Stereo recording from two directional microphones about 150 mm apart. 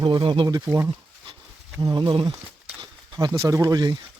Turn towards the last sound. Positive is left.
turn(degrees=-25)  # may be behind; listen again after turning